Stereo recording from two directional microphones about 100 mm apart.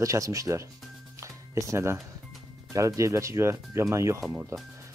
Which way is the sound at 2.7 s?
30° right (ahead or behind).